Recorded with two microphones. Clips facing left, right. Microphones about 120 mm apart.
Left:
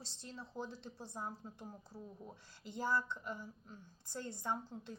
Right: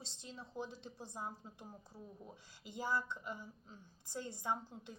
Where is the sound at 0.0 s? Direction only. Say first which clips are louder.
Left 1 dB; 15° right (ahead or behind).